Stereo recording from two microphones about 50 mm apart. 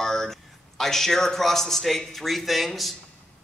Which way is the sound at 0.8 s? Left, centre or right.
Centre.